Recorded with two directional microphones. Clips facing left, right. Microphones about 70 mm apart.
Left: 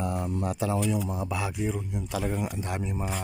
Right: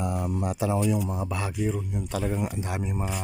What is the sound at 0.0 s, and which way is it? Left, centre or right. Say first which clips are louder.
Speech: right 1 dB; centre.